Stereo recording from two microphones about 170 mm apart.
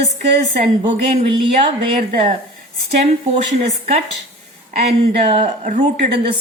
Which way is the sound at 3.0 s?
40° right (ahead or behind).